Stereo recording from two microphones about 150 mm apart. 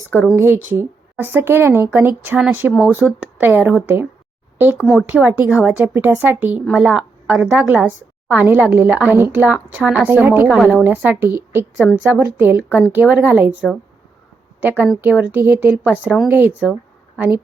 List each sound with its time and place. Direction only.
0.3 s a woman's voice: 15° right (ahead or behind)
10.6 s speech: centre (ahead or behind)
10.8 s a woman's voice: 10° right (ahead or behind)